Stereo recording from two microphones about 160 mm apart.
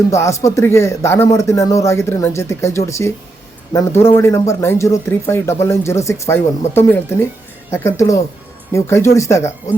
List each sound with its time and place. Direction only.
0.1 s speech: 20° left (ahead or behind)